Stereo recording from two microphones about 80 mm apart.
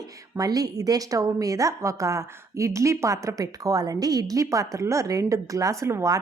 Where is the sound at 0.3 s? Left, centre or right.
Right.